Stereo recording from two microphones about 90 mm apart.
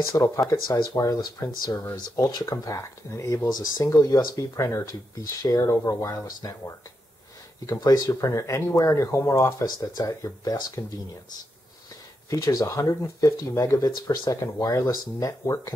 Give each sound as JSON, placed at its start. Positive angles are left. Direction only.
{"t": 0.1, "sound": "speech", "side_deg": 35}
{"t": 0.5, "sound": "speech", "side_deg": 45}
{"t": 12.3, "sound": "speech", "side_deg": 40}